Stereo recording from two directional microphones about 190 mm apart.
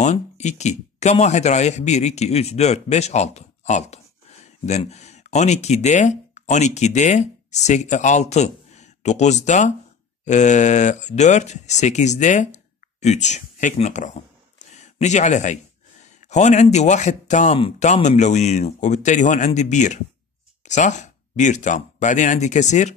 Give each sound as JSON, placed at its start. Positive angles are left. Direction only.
{"t": 0.0, "sound": "speech", "side_deg": 40}